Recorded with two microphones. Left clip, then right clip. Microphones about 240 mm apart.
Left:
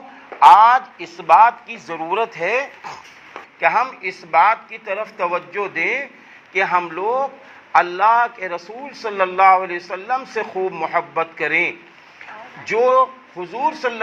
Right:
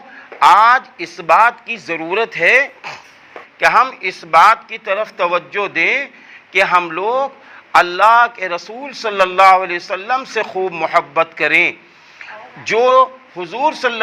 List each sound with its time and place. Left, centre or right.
0.3 s a man's voice: right